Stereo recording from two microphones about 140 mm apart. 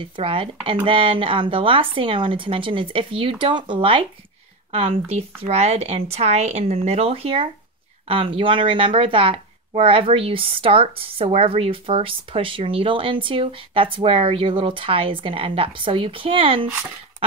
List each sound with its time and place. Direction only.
0.0 s a woman's voice: 40° right (ahead or behind)